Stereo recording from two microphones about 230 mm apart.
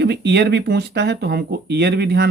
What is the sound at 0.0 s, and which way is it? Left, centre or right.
Speech, right.